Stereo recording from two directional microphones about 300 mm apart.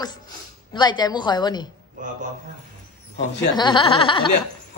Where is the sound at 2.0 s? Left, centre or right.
Right.